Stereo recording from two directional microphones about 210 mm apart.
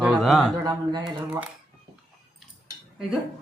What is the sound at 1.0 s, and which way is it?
Speech, 5° right (ahead or behind).